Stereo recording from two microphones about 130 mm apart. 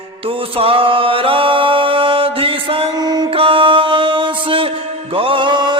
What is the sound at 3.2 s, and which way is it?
Music, 45° right (ahead or behind).